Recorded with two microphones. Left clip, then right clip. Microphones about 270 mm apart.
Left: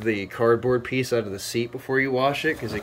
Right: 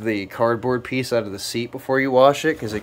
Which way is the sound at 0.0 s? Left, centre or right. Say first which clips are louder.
Right 2 dB; centre.